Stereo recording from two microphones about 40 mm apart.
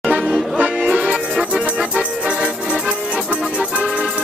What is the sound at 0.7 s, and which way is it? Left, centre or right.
Music, centre.